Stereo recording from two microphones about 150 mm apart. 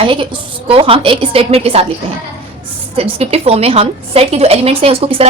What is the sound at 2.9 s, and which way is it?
A woman's voice, 40° right (ahead or behind).